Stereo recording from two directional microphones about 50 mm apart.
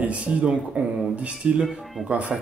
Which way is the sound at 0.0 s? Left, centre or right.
Right.